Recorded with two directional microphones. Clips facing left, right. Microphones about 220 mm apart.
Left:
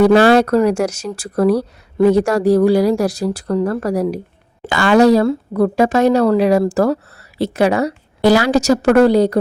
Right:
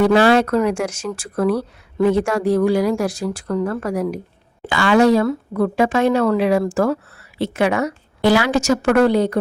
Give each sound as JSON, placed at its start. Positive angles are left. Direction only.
{"t": 0.0, "sound": "speech", "side_deg": 40}
{"t": 4.6, "sound": "speech", "side_deg": 45}